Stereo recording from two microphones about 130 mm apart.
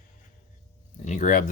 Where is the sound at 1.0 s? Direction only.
70° left (ahead or behind).